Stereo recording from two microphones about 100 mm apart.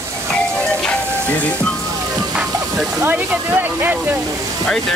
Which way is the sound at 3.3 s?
20° right (ahead or behind).